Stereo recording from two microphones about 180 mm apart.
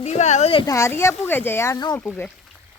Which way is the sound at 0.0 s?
40° left (ahead or behind).